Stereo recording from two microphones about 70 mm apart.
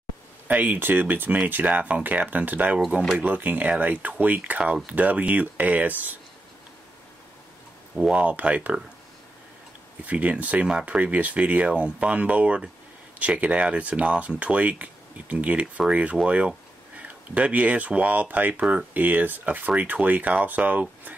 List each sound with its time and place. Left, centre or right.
0.5 s speech: right
8.1 s speech: centre
10.0 s speech: right